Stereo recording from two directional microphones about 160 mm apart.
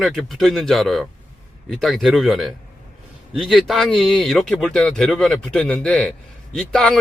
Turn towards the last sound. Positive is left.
turn(degrees=5)  # may be behind; listen again after turning